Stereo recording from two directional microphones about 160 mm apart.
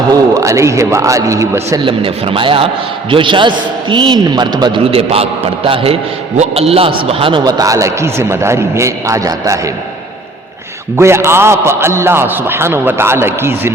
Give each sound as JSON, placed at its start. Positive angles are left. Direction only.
{"t": 0.1, "sound": "a man's voice", "side_deg": -20}
{"t": 1.8, "sound": "a man's voice", "side_deg": -35}
{"t": 4.9, "sound": "a man's voice", "side_deg": -40}
{"t": 10.9, "sound": "a man's voice", "side_deg": -15}